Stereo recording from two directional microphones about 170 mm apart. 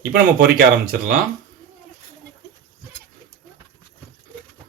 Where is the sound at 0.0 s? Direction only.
60° right (ahead or behind).